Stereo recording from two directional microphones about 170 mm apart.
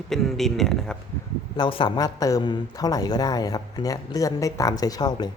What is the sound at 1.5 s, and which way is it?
Speech, 25° left (ahead or behind).